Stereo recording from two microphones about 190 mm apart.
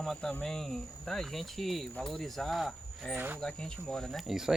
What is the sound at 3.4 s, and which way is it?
Speech, 5° left (ahead or behind).